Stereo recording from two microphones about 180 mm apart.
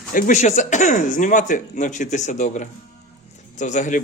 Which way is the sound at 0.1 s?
45° left (ahead or behind).